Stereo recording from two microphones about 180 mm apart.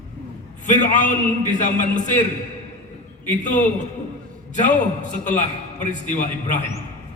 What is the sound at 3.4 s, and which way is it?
A man's voice, 45° left (ahead or behind).